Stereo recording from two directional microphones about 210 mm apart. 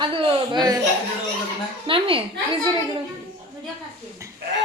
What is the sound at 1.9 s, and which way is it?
Speech, 25° right (ahead or behind).